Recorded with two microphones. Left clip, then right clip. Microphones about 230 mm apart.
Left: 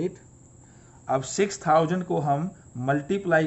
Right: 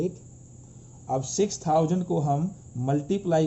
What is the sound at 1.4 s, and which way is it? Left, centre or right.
Speech, left.